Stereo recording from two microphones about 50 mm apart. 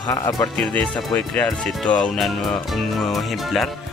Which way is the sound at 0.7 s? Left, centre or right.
Left.